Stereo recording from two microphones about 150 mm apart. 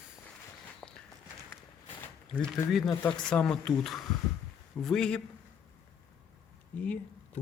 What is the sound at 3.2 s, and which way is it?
Speech, 5° left (ahead or behind).